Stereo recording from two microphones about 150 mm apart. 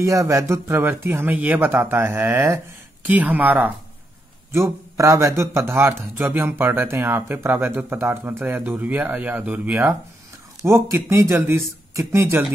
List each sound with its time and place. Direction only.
0.0 s a man's voice: 20° right (ahead or behind)